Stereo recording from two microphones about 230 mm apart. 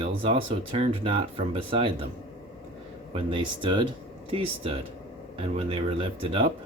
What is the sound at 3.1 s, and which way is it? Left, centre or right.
Speech, right.